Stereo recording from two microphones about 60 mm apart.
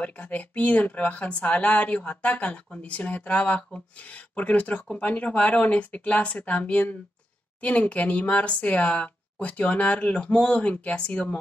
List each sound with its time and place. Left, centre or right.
0.0 s speech: left